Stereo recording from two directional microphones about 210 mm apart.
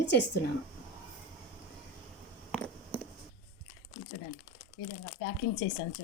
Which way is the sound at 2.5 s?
5° left (ahead or behind).